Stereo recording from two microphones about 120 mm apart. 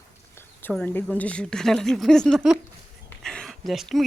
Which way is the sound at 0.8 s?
15° left (ahead or behind).